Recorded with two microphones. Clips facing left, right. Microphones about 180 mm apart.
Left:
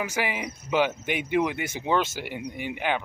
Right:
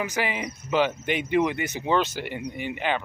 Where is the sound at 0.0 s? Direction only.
10° left (ahead or behind).